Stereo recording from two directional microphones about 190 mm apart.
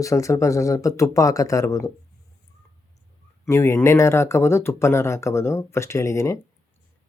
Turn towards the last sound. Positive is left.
turn(degrees=15)  # may be behind; listen again after turning